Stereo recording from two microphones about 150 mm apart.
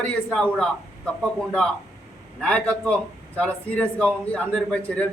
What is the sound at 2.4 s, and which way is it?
A man's voice, 5° left (ahead or behind).